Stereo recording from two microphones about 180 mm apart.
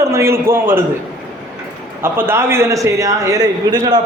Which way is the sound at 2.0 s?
15° right (ahead or behind).